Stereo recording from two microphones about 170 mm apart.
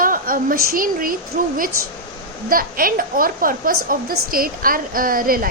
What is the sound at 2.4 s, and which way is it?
Speech, 55° right (ahead or behind).